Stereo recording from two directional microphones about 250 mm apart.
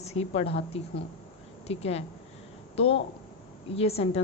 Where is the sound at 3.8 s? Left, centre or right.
Left.